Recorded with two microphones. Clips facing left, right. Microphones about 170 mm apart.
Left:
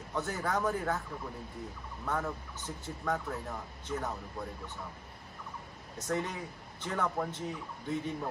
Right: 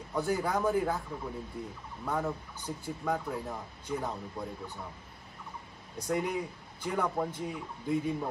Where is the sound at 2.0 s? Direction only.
15° right (ahead or behind).